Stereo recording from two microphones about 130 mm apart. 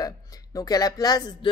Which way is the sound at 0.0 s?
30° left (ahead or behind).